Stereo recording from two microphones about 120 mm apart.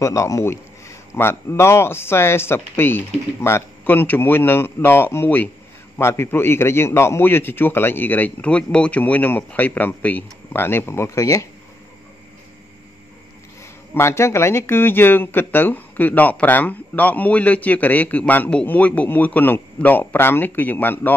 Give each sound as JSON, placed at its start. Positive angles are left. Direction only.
{"t": 0.0, "sound": "speech", "side_deg": 25}
{"t": 13.9, "sound": "speech", "side_deg": 20}